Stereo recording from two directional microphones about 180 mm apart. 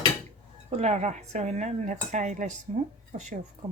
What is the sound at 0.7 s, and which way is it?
Speech, 35° right (ahead or behind).